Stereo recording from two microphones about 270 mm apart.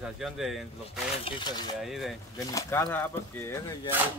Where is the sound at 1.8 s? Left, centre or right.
Centre.